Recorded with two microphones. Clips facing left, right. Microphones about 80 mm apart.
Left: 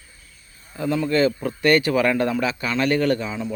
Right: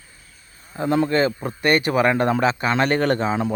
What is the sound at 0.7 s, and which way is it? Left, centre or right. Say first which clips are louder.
Speech: right 3 dB; right.